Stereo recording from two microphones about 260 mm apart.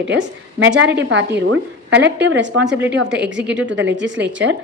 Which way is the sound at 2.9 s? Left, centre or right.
Right.